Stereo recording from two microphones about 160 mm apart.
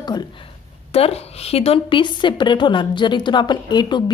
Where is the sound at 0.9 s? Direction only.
40° left (ahead or behind).